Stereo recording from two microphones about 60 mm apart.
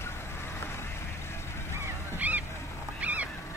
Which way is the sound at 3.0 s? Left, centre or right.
Right.